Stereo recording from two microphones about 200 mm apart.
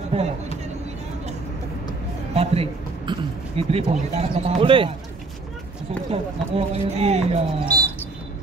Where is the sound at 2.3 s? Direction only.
25° right (ahead or behind).